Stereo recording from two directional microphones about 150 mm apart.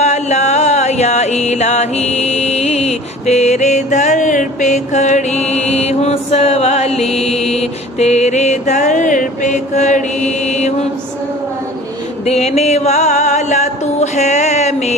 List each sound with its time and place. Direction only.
0.0 s music: 50° left (ahead or behind)
12.2 s music: 45° left (ahead or behind)